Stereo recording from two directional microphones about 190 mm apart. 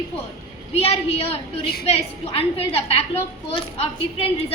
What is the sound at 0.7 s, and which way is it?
A woman's voice, 30° left (ahead or behind).